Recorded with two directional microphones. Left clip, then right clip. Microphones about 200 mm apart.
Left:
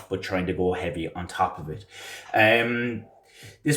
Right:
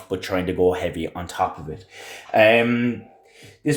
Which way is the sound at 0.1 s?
35° right (ahead or behind).